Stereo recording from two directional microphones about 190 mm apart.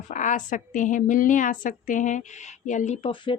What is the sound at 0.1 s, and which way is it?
A woman's voice, 40° left (ahead or behind).